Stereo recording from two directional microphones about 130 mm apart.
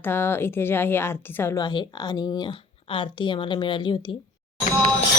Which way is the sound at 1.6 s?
35° left (ahead or behind).